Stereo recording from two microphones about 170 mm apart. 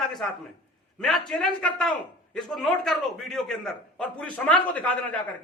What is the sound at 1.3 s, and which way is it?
A man's voice, centre (ahead or behind).